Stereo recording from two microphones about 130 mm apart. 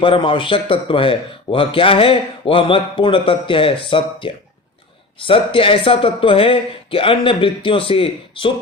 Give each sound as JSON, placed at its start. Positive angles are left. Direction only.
{"t": 0.0, "sound": "speech", "side_deg": 40}